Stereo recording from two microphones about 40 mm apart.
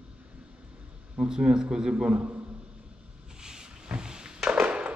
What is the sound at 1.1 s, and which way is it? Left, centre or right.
A man's voice, centre.